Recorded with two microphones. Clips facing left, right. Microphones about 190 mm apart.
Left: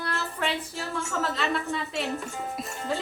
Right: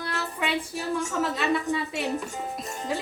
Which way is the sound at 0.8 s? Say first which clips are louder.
Right 3 dB; 15° right (ahead or behind).